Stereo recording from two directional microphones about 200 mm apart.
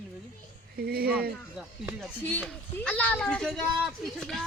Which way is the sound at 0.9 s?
50° right (ahead or behind).